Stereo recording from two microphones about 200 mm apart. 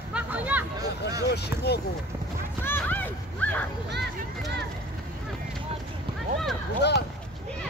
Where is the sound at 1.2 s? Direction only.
55° left (ahead or behind).